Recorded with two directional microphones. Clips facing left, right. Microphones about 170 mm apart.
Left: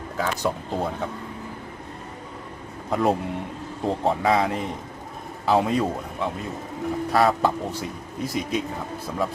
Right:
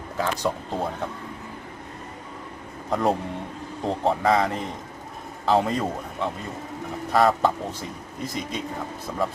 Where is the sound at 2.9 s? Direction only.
5° left (ahead or behind).